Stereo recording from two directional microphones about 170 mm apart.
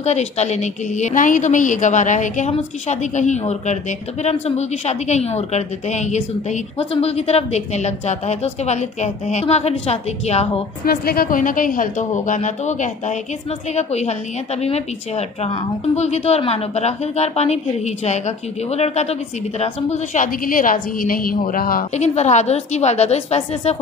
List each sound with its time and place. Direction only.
0.0 s a woman's voice: 40° left (ahead or behind)
10.9 s a woman's voice: 60° left (ahead or behind)
21.9 s a woman's voice: 40° left (ahead or behind)